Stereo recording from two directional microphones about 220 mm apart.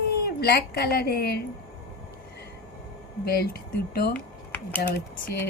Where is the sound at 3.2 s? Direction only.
45° left (ahead or behind).